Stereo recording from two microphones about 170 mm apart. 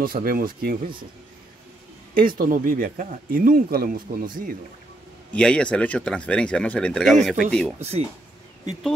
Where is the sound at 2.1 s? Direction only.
55° right (ahead or behind).